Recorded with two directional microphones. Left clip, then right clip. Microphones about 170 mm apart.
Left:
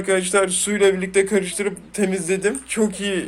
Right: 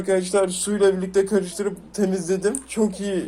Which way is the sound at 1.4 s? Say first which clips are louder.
Left 2 dB; centre (ahead or behind).